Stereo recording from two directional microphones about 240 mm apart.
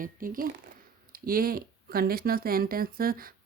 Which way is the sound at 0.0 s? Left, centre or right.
Right.